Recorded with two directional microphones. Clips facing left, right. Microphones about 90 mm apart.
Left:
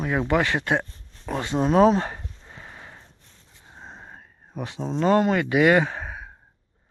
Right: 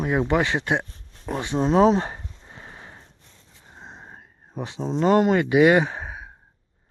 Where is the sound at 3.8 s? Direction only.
Centre (ahead or behind).